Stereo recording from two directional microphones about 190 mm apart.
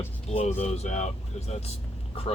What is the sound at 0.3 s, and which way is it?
Speech, 35° left (ahead or behind).